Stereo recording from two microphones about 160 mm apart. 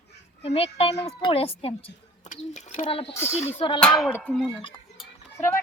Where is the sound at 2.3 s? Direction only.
50° left (ahead or behind).